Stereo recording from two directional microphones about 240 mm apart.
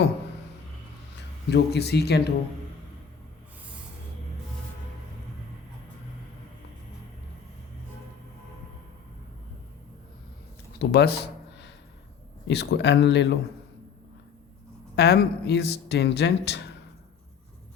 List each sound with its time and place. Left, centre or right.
1.5 s speech: left
10.8 s speech: left
12.5 s speech: left
14.9 s speech: left